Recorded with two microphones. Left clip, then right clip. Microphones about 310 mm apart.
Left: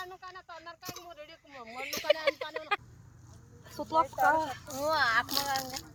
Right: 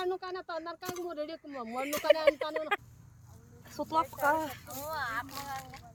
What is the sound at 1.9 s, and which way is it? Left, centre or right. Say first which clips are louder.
Speech: right 3 dB; centre.